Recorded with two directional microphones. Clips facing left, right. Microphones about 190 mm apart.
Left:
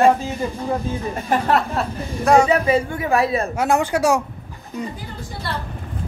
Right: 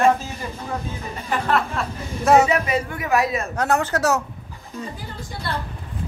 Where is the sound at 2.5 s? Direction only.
30° left (ahead or behind).